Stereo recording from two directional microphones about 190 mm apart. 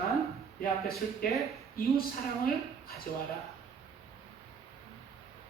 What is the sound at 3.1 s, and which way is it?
Speech, 50° left (ahead or behind).